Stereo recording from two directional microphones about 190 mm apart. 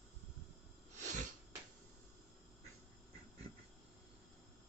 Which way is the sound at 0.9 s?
40° right (ahead or behind).